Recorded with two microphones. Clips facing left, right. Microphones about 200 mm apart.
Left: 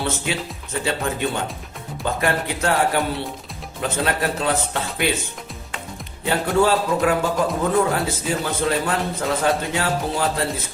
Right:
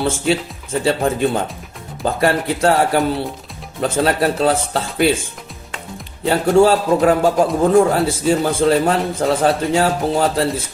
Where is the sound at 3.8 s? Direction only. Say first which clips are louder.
Right 6 dB; 35° right (ahead or behind).